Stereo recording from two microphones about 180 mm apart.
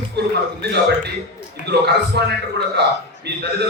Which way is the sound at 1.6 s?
70° right (ahead or behind).